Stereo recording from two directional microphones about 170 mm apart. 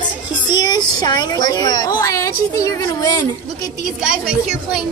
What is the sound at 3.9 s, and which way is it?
Speech, 5° right (ahead or behind).